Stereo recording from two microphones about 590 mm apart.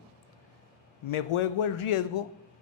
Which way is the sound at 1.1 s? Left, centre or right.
Left.